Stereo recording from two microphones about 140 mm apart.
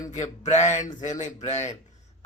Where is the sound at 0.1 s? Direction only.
55° left (ahead or behind).